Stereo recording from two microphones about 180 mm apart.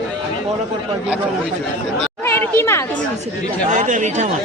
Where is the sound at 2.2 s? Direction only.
10° left (ahead or behind).